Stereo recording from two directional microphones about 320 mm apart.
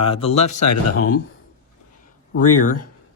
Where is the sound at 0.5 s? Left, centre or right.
Left.